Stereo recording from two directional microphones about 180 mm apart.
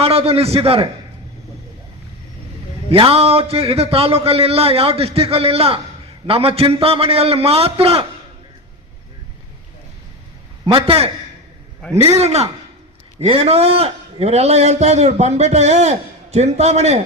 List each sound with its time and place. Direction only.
0.0 s a man's voice: 35° right (ahead or behind)
2.9 s a man's voice: 30° right (ahead or behind)
10.7 s a man's voice: 30° right (ahead or behind)